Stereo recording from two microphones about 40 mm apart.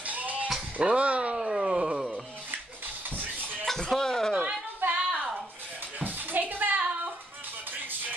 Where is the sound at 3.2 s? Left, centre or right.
Right.